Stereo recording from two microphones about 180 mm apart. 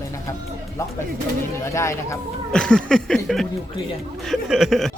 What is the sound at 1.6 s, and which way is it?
Speech, 15° left (ahead or behind).